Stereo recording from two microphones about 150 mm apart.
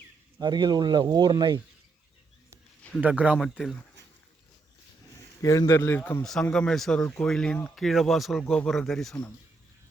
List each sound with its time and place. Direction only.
0.3 s speech: 30° right (ahead or behind)
3.0 s a man's voice: 10° right (ahead or behind)
5.4 s a man's voice: 20° left (ahead or behind); by 9.3 s 5° left (ahead or behind)